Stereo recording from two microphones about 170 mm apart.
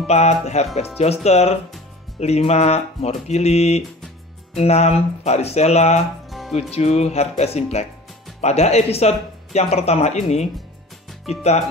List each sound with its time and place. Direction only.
0.0 s speech: 40° left (ahead or behind)
6.2 s music: centre (ahead or behind)
6.7 s speech: 40° left (ahead or behind)